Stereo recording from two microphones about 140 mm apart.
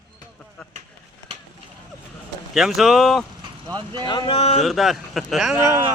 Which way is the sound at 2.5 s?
5° right (ahead or behind).